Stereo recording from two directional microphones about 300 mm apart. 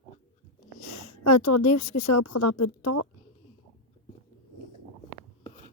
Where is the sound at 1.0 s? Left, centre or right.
Left.